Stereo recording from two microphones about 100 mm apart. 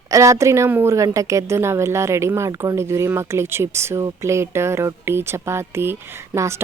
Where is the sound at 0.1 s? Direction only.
30° right (ahead or behind).